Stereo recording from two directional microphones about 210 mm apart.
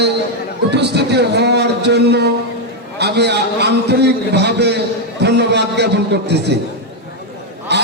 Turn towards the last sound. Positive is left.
turn(degrees=-55)  # may be behind; listen again after turning